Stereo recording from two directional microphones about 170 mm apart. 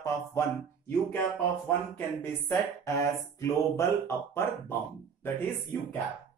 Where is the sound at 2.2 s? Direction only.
15° left (ahead or behind).